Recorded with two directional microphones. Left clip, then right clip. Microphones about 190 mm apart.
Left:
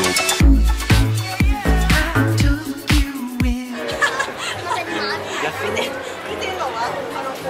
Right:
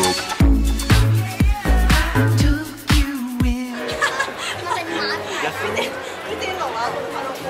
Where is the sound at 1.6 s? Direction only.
Centre (ahead or behind).